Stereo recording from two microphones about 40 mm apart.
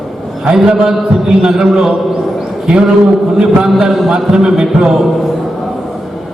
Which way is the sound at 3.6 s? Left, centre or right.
Centre.